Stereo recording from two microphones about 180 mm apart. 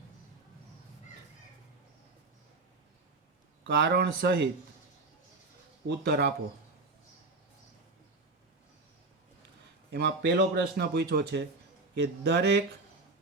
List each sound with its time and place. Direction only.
3.7 s speech: 75° right (ahead or behind)
5.9 s speech: 60° right (ahead or behind)
9.9 s speech: 70° right (ahead or behind)